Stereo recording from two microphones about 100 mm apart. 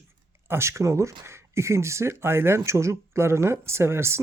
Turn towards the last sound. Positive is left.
turn(degrees=-25)  # may be behind; listen again after turning